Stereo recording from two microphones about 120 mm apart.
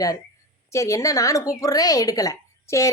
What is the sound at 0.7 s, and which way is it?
A woman's voice, 25° left (ahead or behind).